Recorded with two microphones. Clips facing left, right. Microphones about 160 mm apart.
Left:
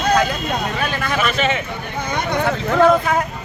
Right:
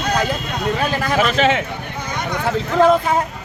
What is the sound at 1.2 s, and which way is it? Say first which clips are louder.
Speech: right 4 dB; 90° right.